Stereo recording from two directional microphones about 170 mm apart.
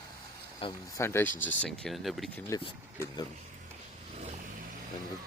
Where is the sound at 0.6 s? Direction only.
30° left (ahead or behind).